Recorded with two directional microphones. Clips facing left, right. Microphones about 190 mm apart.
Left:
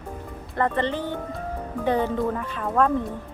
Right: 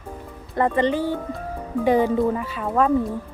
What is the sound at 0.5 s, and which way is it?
Speech, 10° right (ahead or behind).